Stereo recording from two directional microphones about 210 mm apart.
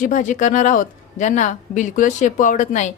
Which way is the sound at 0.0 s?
35° left (ahead or behind).